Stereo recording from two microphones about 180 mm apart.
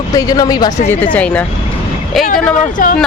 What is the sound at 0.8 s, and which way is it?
Speech, 10° left (ahead or behind).